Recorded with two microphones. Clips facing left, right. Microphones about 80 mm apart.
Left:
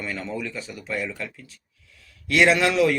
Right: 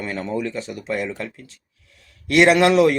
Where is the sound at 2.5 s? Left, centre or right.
Right.